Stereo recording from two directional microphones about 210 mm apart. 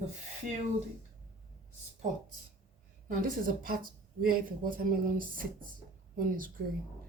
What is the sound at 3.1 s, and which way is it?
Speech, 40° right (ahead or behind).